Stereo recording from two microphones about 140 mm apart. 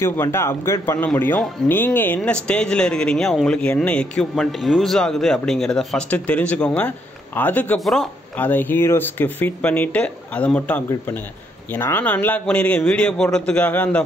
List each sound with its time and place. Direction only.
0.0 s speech: 15° left (ahead or behind)
7.8 s speech: centre (ahead or behind)
8.4 s speech: 15° left (ahead or behind)